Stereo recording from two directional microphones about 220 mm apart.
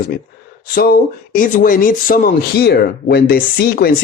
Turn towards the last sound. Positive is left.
turn(degrees=45)  # may be behind; listen again after turning